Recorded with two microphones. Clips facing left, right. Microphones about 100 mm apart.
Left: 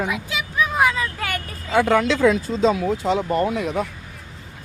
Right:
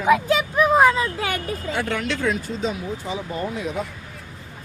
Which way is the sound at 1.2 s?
50° left (ahead or behind).